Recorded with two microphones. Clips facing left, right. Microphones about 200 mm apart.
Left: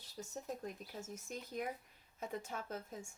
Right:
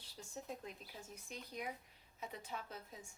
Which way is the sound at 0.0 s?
45° left (ahead or behind).